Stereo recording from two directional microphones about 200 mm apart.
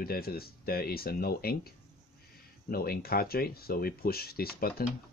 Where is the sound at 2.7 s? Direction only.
50° left (ahead or behind).